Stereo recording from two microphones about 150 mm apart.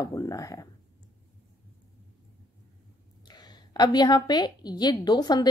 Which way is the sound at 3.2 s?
30° left (ahead or behind).